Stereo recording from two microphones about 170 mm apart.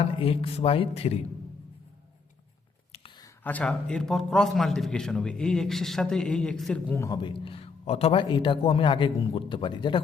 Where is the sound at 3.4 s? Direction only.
10° left (ahead or behind).